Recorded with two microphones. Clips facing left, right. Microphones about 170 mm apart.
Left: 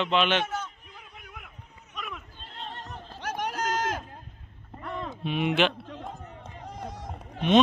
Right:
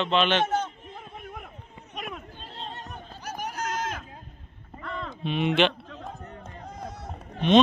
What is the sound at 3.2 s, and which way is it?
Run, 90° left.